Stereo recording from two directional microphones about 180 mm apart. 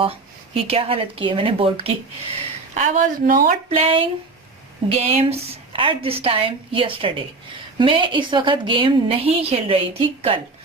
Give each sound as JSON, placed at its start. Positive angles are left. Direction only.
{"t": 0.0, "sound": "a woman's voice", "side_deg": -35}
{"t": 2.7, "sound": "speech", "side_deg": -45}
{"t": 3.8, "sound": "a woman's voice", "side_deg": -30}